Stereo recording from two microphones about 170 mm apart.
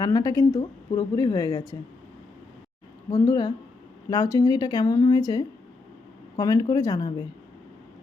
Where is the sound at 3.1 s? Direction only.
20° left (ahead or behind).